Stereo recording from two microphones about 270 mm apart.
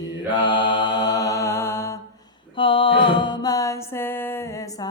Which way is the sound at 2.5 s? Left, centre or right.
Centre.